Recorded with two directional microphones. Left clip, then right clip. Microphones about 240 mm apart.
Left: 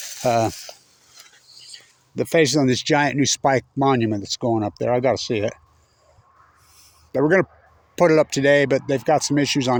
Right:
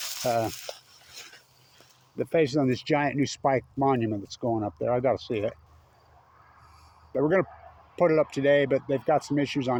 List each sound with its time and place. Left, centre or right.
0.2 s speech: left
2.1 s speech: left
7.1 s speech: left